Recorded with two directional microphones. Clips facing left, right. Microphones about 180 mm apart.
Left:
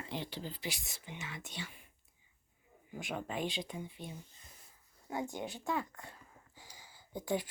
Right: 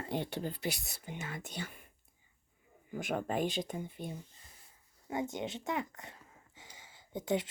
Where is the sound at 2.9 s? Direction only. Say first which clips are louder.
Right 5 dB; 50° right (ahead or behind).